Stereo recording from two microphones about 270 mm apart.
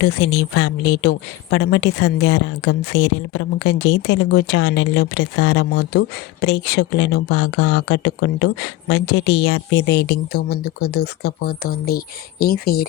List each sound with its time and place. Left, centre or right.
0.0 s a woman's voice: left